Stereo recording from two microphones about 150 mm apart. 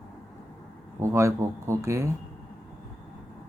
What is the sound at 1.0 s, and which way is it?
Speech, 20° right (ahead or behind).